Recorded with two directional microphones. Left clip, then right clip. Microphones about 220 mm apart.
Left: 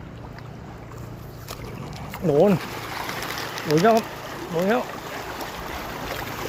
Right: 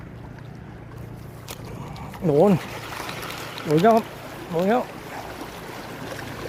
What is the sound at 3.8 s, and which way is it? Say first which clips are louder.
Speech: right 2 dB; 10° right (ahead or behind).